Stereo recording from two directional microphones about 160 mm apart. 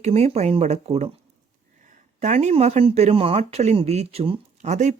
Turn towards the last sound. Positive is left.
turn(degrees=-45)  # may be behind; listen again after turning